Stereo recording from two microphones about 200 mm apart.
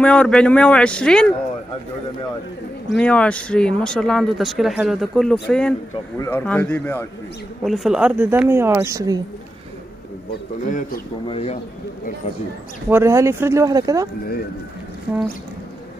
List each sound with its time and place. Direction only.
0.0 s speech: 5° left (ahead or behind)
2.9 s speech: 5° left (ahead or behind)
7.6 s speech: centre (ahead or behind)
10.7 s speech: 40° left (ahead or behind)
11.2 s speech: 30° left (ahead or behind)
12.9 s speech: 15° right (ahead or behind)
15.1 s speech: 10° right (ahead or behind)